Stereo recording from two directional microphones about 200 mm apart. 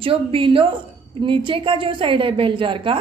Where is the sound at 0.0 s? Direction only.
25° right (ahead or behind).